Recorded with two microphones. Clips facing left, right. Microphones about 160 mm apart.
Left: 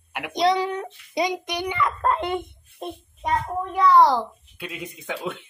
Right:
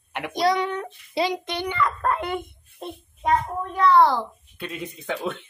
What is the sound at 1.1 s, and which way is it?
A child's voice, 15° left (ahead or behind).